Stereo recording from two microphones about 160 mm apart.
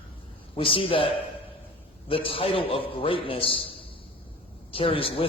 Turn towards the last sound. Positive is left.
turn(degrees=35)  # may be behind; listen again after turning